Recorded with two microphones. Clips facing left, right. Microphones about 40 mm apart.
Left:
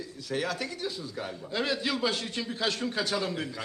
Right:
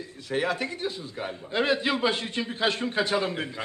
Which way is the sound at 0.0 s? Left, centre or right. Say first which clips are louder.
Right 4 dB; right.